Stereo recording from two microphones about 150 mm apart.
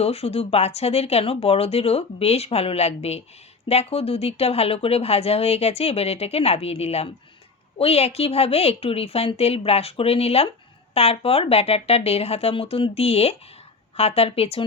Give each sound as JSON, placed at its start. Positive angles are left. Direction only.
{"t": 0.0, "sound": "a woman's voice", "side_deg": 45}